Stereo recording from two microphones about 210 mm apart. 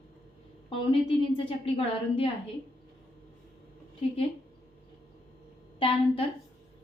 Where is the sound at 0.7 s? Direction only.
25° left (ahead or behind).